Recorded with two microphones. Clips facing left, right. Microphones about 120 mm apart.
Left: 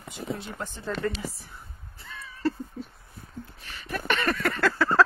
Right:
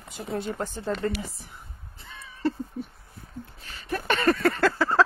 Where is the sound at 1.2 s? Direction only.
20° right (ahead or behind).